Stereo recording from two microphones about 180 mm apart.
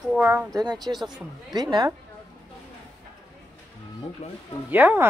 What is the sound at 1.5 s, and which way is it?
Speech, 25° right (ahead or behind).